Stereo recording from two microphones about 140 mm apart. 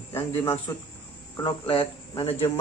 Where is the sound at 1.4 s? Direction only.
35° left (ahead or behind).